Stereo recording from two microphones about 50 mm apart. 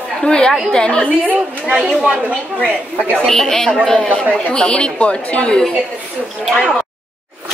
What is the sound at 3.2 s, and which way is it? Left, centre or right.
A woman's voice, centre.